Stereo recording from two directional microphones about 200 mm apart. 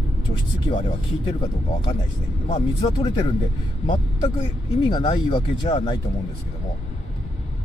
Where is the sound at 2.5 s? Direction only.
25° left (ahead or behind).